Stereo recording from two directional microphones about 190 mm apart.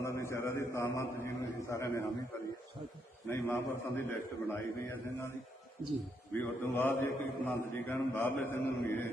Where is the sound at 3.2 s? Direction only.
15° left (ahead or behind).